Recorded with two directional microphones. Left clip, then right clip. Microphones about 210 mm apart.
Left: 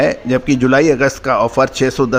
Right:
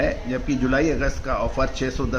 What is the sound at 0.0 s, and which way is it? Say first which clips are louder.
A man's voice: left 10 dB; 45° left (ahead or behind).